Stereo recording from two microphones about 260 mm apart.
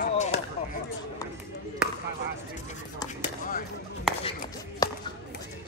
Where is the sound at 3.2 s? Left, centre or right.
Left.